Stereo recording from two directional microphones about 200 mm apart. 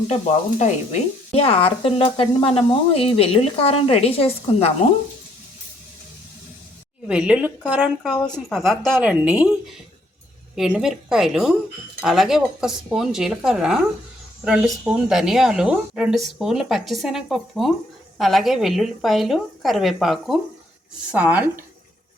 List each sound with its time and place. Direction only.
0.6 s speech: 35° left (ahead or behind)
7.1 s speech: 5° right (ahead or behind)